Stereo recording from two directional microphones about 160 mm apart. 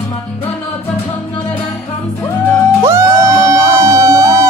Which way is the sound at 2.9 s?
20° right (ahead or behind).